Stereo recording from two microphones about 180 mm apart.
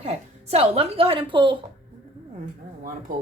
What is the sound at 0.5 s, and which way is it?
Speech, 35° right (ahead or behind).